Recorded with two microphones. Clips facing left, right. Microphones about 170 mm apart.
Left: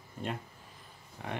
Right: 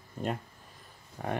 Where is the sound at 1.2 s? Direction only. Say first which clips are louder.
Right 6 dB; 45° right (ahead or behind).